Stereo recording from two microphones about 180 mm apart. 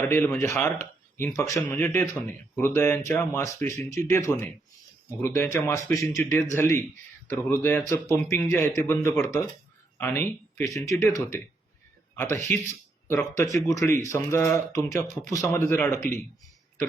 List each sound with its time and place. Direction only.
0.0 s speech: 10° left (ahead or behind)
12.1 s speech: 15° left (ahead or behind)